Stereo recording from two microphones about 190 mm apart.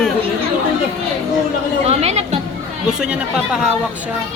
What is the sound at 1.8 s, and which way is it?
Speech, 35° right (ahead or behind).